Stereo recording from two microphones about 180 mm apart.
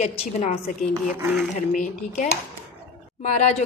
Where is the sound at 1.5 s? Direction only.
45° left (ahead or behind).